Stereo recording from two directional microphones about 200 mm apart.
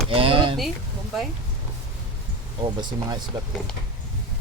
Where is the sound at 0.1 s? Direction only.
25° right (ahead or behind).